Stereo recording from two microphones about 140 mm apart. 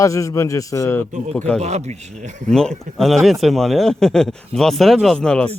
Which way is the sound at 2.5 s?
5° left (ahead or behind).